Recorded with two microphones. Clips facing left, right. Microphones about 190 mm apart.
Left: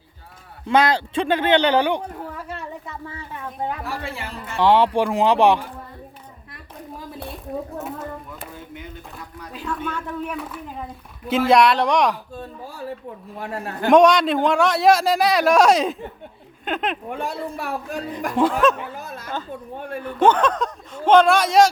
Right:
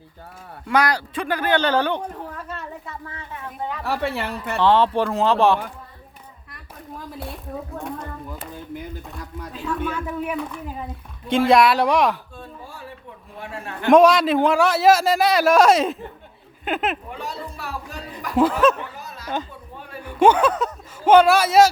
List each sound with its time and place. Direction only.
0.6 s speech: 25° left (ahead or behind)
3.8 s speech: 65° right (ahead or behind)
4.6 s speech: 15° left (ahead or behind)
7.8 s a sound: 5° left (ahead or behind)
8.3 s a sound: 30° right (ahead or behind)
9.5 s a man's voice: centre (ahead or behind)
13.4 s a man's voice: 40° left (ahead or behind)
13.9 s a man's voice: centre (ahead or behind)
17.1 s a man's voice: 55° left (ahead or behind)
18.3 s a man's voice: centre (ahead or behind)
19.0 s a sound: 50° left (ahead or behind)
20.1 s speech: 10° right (ahead or behind)